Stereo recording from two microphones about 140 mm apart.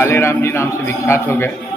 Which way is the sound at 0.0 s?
20° left (ahead or behind).